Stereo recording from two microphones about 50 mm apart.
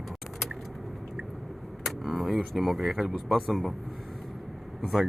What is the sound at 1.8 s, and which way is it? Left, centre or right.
Speech, centre.